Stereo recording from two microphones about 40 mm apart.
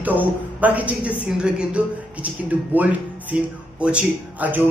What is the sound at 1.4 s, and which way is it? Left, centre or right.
Speech, right.